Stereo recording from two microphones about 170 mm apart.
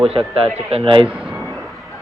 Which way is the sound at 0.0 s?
35° right (ahead or behind).